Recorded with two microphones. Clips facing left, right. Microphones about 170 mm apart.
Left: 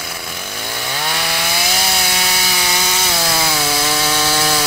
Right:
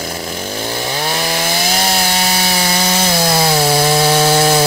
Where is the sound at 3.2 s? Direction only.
35° right (ahead or behind).